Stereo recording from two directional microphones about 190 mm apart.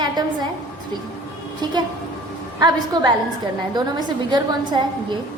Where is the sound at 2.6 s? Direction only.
20° right (ahead or behind).